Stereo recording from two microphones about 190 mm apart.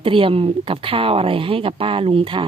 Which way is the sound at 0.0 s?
30° right (ahead or behind).